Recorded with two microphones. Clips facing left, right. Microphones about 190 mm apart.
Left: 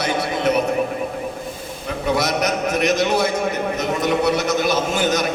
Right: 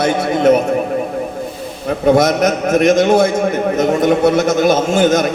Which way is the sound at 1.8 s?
50° right (ahead or behind).